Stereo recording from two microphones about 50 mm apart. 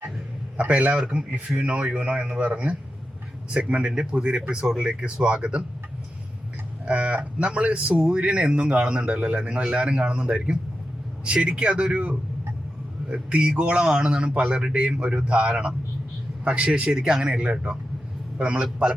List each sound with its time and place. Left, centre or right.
0.7 s a man's voice: right
6.8 s speech: right
13.6 s speech: centre